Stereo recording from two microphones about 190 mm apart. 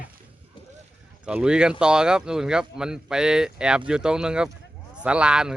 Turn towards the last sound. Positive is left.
turn(degrees=-5)  # may be behind; listen again after turning